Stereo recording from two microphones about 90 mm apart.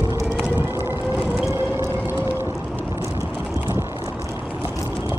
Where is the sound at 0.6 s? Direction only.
25° right (ahead or behind).